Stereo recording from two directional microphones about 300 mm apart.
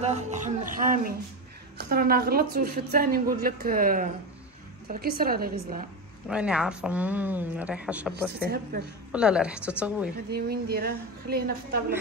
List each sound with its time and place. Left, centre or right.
0.0 s a woman's voice: right
6.2 s a woman's voice: centre
9.1 s a woman's voice: centre
10.3 s a woman's voice: right